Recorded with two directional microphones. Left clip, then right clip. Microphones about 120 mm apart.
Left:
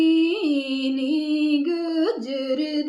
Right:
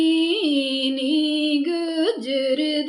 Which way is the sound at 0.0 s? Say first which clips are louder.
Even; 20° right (ahead or behind).